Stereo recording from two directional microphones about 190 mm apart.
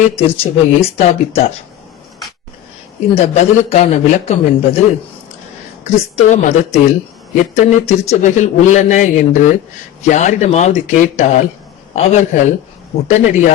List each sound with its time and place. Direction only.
0.2 s speech: 30° left (ahead or behind)
3.2 s speech: 35° left (ahead or behind)
5.8 s speech: 35° left (ahead or behind)